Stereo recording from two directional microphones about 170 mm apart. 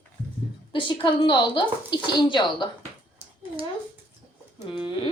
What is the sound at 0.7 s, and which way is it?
A woman's voice, 30° left (ahead or behind).